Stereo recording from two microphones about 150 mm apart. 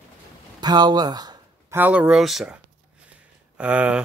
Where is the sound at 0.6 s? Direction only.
30° right (ahead or behind).